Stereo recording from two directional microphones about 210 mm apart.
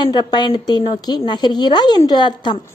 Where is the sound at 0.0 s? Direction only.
20° left (ahead or behind).